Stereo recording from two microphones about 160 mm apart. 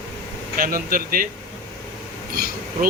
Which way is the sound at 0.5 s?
65° right (ahead or behind).